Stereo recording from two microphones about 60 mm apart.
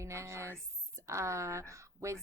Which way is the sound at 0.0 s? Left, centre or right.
Right.